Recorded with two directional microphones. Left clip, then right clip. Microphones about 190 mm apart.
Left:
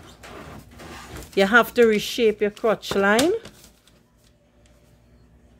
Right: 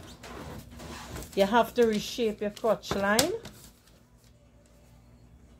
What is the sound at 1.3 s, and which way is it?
Speech, 55° left (ahead or behind).